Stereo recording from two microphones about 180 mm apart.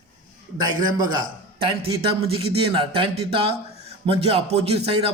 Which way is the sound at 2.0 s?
30° right (ahead or behind).